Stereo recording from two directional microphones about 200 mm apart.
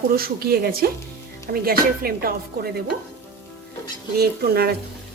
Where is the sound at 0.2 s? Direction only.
50° right (ahead or behind).